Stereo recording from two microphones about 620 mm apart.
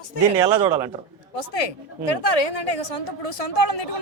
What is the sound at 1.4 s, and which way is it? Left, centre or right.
A woman's voice, left.